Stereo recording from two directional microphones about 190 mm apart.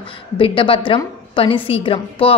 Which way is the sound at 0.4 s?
30° left (ahead or behind).